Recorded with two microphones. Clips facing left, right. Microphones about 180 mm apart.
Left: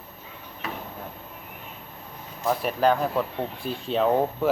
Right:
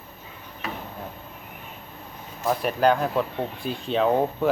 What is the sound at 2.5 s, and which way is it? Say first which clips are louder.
Speech: right 1 dB; centre (ahead or behind).